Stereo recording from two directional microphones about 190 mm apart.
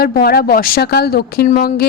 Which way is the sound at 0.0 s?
55° left (ahead or behind).